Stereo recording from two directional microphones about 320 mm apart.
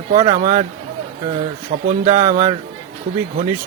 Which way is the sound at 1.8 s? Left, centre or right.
Right.